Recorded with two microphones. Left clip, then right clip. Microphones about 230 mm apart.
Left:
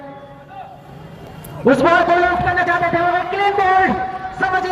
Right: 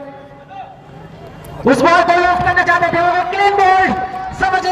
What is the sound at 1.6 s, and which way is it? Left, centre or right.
A man's voice, right.